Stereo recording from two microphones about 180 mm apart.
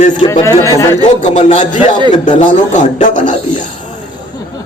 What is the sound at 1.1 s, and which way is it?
A man's voice, 40° left (ahead or behind).